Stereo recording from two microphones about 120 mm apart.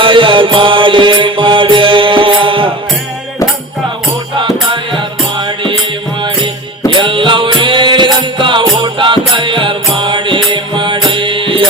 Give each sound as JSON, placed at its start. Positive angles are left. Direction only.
{"t": 0.0, "sound": "music", "side_deg": -45}
{"t": 6.9, "sound": "music", "side_deg": -45}